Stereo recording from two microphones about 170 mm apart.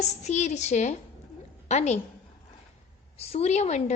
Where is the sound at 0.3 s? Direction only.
40° left (ahead or behind).